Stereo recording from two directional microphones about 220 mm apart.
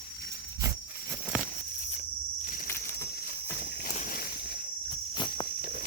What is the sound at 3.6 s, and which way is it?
Walk, 40° left (ahead or behind).